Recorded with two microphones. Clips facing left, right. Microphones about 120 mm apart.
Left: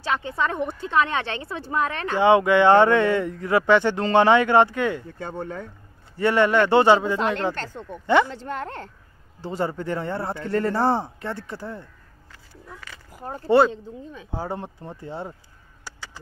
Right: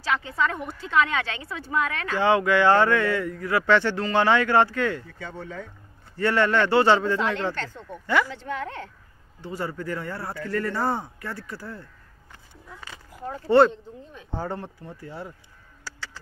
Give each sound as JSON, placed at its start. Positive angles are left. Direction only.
{"t": 0.0, "sound": "speech", "side_deg": 25}
{"t": 5.2, "sound": "speech", "side_deg": 50}
{"t": 6.1, "sound": "speech", "side_deg": 15}
{"t": 7.6, "sound": "speech", "side_deg": 25}
{"t": 8.5, "sound": "speech", "side_deg": 50}
{"t": 9.4, "sound": "speech", "side_deg": 25}
{"t": 13.5, "sound": "speech", "side_deg": 5}
{"t": 14.6, "sound": "speech", "side_deg": 25}
{"t": 15.8, "sound": "a sound", "side_deg": 15}